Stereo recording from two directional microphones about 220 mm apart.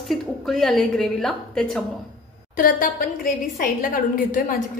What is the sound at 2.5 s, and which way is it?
A woman's voice, 40° left (ahead or behind).